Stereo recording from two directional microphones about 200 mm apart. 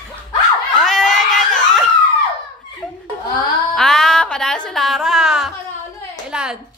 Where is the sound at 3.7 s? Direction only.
Centre (ahead or behind).